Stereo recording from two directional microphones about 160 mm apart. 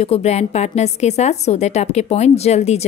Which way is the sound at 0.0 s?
40° left (ahead or behind).